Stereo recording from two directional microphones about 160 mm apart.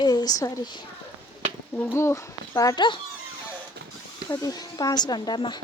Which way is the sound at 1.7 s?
15° left (ahead or behind).